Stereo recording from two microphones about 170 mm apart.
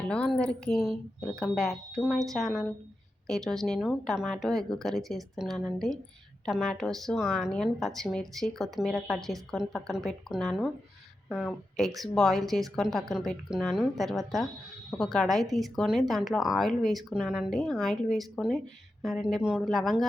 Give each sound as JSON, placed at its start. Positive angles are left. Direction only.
{"t": 0.1, "sound": "speech", "side_deg": 5}